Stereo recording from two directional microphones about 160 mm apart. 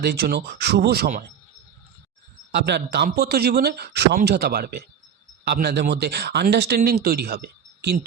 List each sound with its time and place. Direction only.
0.0 s speech: 80° right
2.5 s speech: 90° right